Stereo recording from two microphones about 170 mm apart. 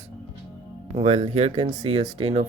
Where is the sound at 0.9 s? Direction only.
40° right (ahead or behind).